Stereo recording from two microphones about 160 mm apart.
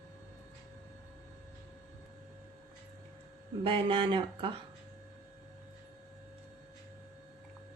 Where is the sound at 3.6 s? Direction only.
35° right (ahead or behind).